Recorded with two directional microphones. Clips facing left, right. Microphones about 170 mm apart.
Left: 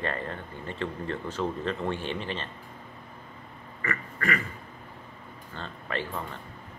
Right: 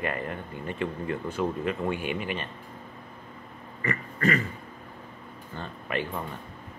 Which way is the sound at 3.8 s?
20° right (ahead or behind).